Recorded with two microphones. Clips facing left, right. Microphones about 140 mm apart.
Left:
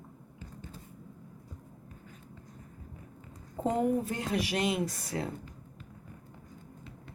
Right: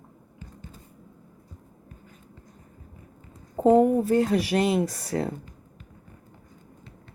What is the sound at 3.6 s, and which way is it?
Speech, 35° right (ahead or behind).